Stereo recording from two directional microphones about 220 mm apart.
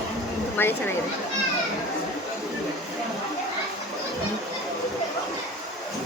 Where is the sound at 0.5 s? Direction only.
10° left (ahead or behind).